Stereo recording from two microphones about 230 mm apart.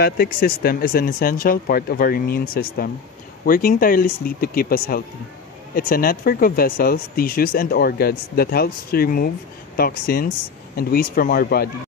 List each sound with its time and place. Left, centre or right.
0.0 s speech: left